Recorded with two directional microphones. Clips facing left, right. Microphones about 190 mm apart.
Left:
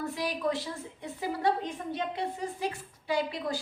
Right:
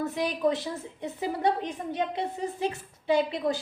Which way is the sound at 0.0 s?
20° right (ahead or behind).